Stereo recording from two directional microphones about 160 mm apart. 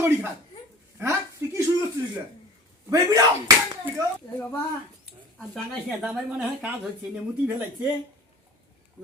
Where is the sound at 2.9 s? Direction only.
20° right (ahead or behind).